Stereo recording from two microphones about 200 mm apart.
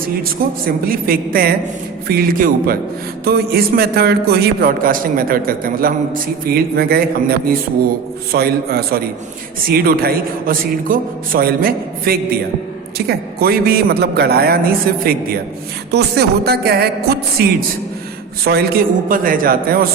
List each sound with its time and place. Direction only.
0.3 s a man's voice: 45° right (ahead or behind)